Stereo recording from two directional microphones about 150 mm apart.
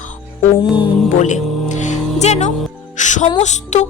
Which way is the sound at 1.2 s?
50° left (ahead or behind).